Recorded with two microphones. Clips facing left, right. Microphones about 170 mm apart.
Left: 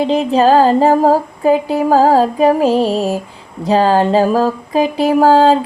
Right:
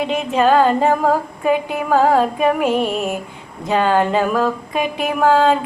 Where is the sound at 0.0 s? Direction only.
35° left (ahead or behind).